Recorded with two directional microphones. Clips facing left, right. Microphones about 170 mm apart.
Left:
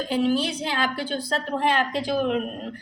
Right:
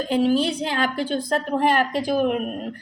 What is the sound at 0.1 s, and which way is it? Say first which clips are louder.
Speech: right 3 dB; 40° right (ahead or behind).